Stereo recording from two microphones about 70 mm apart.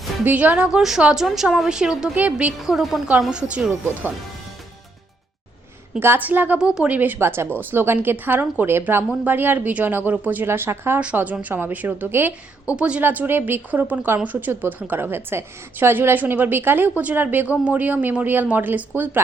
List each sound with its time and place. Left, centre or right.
0.3 s a woman's voice: right
0.8 s a woman's voice: centre
2.1 s a woman's voice: right
2.6 s a woman's voice: centre
6.0 s a woman's voice: right
6.6 s a woman's voice: centre
7.2 s a woman's voice: right
11.0 s a woman's voice: right
12.7 s a woman's voice: centre
13.0 s a woman's voice: right